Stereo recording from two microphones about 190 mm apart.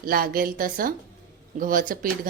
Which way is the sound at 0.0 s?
50° right (ahead or behind).